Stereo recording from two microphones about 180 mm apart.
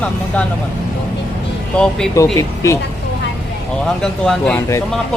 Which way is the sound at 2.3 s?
15° left (ahead or behind).